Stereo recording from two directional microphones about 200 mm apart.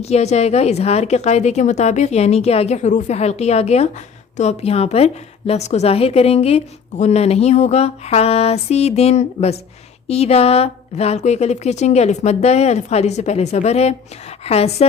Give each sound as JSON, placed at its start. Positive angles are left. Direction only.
{"t": 0.0, "sound": "a woman's voice", "side_deg": 30}